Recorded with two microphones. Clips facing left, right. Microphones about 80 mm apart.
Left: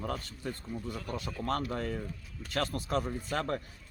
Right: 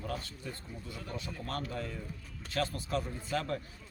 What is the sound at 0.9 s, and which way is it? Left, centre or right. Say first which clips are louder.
Speech: left 1 dB; left.